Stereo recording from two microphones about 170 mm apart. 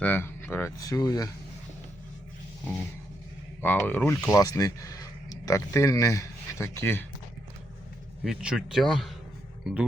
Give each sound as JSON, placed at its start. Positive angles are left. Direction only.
{"t": 0.0, "sound": "speech", "side_deg": 10}
{"t": 3.6, "sound": "speech", "side_deg": 10}
{"t": 8.2, "sound": "a man's voice", "side_deg": -5}